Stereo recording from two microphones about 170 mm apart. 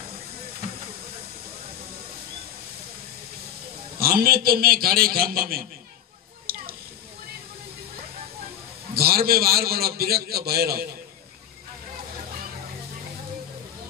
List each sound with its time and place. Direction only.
4.0 s a man's voice: 60° right (ahead or behind)
6.5 s a sound: 65° right (ahead or behind)
8.9 s a man's voice: 65° right (ahead or behind)